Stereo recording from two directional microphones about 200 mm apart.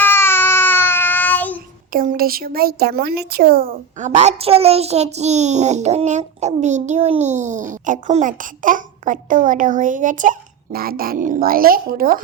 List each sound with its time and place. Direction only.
0.0 s child singing: 10° left (ahead or behind)
1.9 s speech: 45° right (ahead or behind)